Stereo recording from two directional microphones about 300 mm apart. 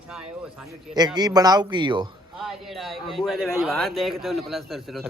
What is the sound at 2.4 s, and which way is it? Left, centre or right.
A man's voice, centre.